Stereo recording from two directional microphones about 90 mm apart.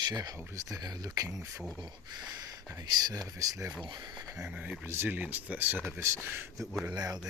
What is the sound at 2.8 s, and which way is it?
Speech, 45° right (ahead or behind).